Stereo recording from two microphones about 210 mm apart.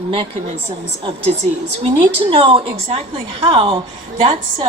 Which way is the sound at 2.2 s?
25° right (ahead or behind).